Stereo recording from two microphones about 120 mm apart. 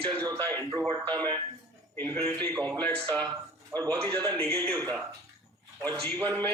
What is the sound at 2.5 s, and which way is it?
Speech, 35° right (ahead or behind).